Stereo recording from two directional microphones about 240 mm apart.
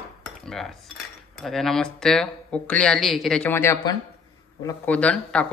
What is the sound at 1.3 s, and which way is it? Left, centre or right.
Speech, centre.